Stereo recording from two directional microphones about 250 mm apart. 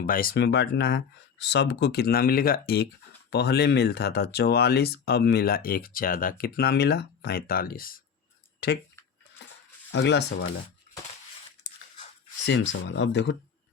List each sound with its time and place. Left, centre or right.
0.0 s speech: left
9.9 s speech: left
12.5 s speech: left